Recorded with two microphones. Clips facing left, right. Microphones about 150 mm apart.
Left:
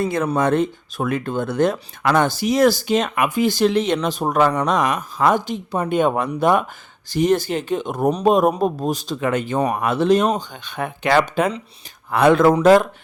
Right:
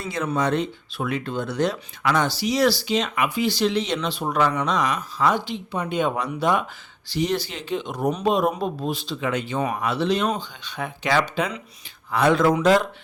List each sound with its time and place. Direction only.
0.0 s speech: 50° left (ahead or behind)